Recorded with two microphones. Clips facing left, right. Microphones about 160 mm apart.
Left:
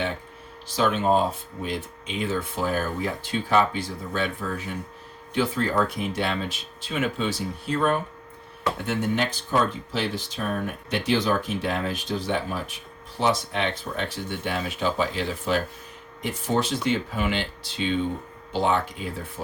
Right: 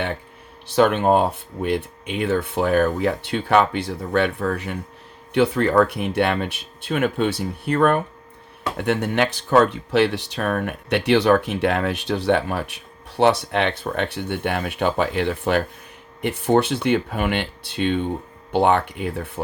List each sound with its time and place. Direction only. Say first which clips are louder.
0.7 s speech: right 5 dB; 60° right (ahead or behind)